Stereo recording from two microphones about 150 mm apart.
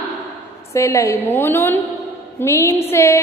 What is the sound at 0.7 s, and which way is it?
A woman's voice, 20° left (ahead or behind).